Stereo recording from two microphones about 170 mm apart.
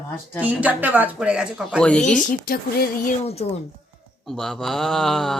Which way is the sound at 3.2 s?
35° left (ahead or behind).